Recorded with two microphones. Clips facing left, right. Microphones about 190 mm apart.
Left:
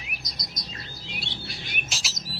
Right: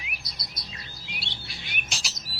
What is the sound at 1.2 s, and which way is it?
Bird, 45° left (ahead or behind).